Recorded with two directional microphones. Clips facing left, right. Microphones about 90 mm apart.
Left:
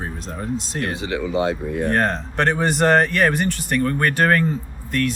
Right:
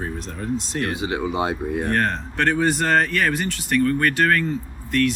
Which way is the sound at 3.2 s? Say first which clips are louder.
Left 3 dB; 45° left (ahead or behind).